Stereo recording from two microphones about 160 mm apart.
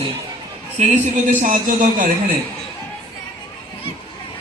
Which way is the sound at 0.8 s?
50° right (ahead or behind).